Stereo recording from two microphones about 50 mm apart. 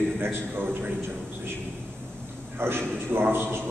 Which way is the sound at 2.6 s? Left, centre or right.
Right.